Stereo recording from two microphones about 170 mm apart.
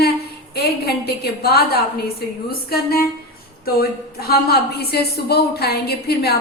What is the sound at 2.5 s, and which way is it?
A woman's voice, 65° left (ahead or behind).